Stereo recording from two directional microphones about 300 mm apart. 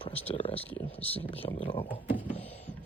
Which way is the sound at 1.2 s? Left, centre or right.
Centre.